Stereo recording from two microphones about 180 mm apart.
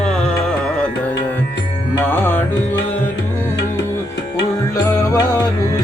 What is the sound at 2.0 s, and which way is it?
Music, 10° left (ahead or behind).